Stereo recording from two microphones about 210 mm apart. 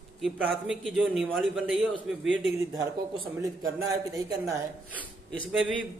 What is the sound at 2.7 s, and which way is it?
A man's voice, 15° right (ahead or behind).